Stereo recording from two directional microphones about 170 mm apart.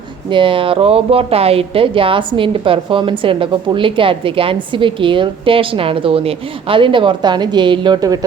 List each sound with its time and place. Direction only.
0.3 s a woman's voice: 30° right (ahead or behind)